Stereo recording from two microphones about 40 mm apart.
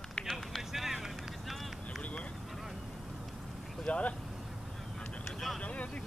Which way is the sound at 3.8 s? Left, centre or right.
Left.